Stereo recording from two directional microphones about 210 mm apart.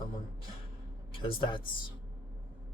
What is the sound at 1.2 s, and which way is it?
Speech, 25° left (ahead or behind).